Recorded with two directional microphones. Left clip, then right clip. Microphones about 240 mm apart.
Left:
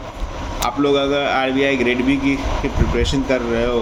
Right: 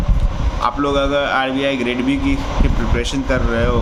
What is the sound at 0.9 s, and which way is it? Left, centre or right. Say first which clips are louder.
Speech: left 2 dB; centre.